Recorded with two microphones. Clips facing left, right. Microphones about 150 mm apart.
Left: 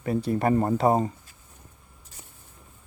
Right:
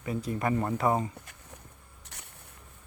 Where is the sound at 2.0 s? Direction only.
75° right (ahead or behind).